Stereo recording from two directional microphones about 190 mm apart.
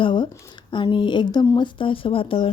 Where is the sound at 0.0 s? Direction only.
25° left (ahead or behind).